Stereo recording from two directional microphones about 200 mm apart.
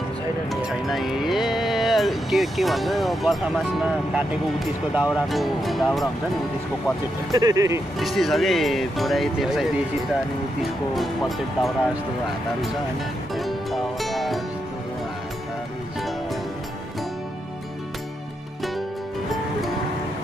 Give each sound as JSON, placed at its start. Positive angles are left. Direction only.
{"t": 0.5, "sound": "speech", "side_deg": 0}
{"t": 7.3, "sound": "speech", "side_deg": -15}
{"t": 8.0, "sound": "speech", "side_deg": 0}
{"t": 11.0, "sound": "speech", "side_deg": 0}
{"t": 13.4, "sound": "music", "side_deg": 0}